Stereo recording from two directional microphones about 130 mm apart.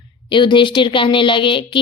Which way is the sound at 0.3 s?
40° left (ahead or behind).